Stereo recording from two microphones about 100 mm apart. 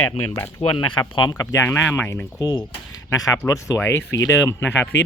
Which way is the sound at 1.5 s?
25° left (ahead or behind).